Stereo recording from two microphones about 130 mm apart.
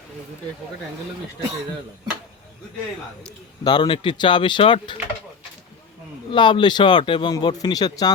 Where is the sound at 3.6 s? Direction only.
35° left (ahead or behind).